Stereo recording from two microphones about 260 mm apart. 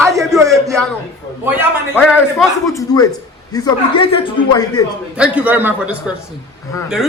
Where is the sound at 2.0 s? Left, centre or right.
Centre.